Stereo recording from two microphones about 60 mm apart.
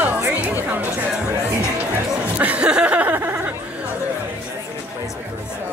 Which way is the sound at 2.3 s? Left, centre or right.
Right.